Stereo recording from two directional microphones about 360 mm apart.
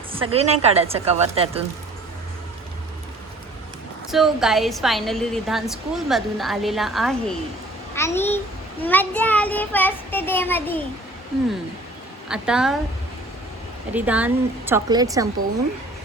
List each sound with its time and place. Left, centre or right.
0.1 s a woman's voice: centre
4.1 s a woman's voice: centre
12.3 s a woman's voice: centre
13.9 s a woman's voice: centre